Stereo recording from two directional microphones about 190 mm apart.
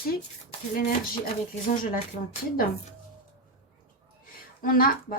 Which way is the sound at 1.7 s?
45° left (ahead or behind).